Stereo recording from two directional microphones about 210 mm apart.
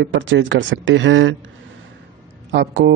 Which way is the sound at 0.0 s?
65° right (ahead or behind).